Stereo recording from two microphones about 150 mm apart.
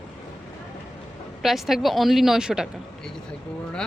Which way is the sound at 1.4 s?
Centre (ahead or behind).